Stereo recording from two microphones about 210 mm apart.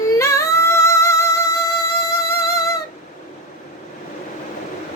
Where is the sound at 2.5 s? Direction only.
15° left (ahead or behind).